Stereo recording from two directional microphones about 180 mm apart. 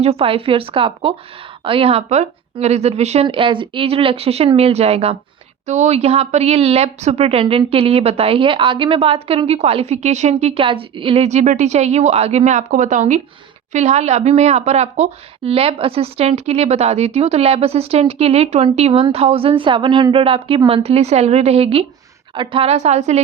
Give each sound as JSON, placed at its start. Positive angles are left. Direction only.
{"t": 0.0, "sound": "a woman's voice", "side_deg": -35}